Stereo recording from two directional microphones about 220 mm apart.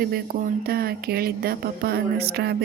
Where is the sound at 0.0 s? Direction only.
40° right (ahead or behind).